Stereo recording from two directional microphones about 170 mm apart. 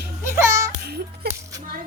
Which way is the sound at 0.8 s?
70° right (ahead or behind).